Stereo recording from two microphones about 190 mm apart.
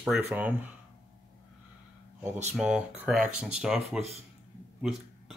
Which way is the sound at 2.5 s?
5° right (ahead or behind).